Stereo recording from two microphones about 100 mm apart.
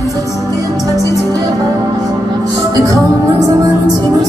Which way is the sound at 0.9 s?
30° left (ahead or behind).